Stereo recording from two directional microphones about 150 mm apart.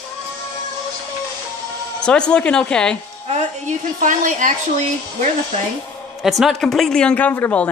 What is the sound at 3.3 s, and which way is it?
A woman's voice, 55° right (ahead or behind).